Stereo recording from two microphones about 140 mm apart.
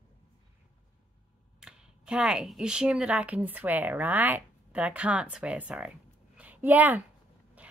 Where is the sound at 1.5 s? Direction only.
5° right (ahead or behind).